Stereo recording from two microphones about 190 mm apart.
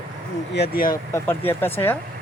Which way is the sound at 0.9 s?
15° left (ahead or behind).